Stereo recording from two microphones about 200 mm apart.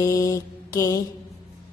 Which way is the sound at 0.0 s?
15° left (ahead or behind).